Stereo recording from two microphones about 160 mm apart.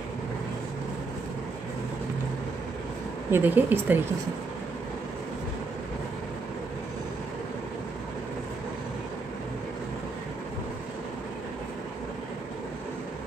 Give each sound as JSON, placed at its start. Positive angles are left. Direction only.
{"t": 3.3, "sound": "speech", "side_deg": -15}